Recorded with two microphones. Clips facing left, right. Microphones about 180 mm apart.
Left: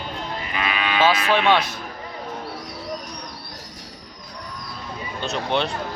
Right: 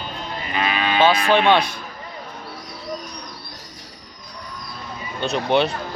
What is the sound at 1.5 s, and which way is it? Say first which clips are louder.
Speech: right 2 dB; centre (ahead or behind).